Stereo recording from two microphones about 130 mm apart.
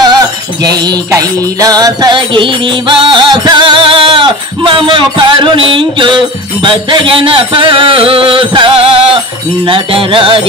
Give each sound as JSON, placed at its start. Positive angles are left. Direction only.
{"t": 0.6, "sound": "music", "side_deg": -30}